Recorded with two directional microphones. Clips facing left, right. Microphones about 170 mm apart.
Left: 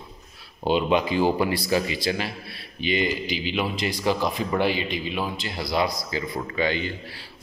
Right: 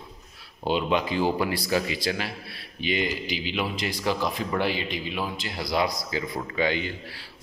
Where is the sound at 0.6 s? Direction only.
5° left (ahead or behind).